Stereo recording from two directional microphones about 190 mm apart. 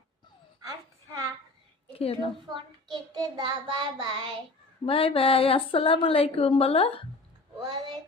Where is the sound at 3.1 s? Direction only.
20° right (ahead or behind).